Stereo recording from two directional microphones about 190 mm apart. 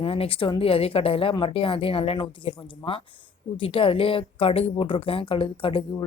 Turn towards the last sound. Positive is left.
turn(degrees=30)  # may be behind; listen again after turning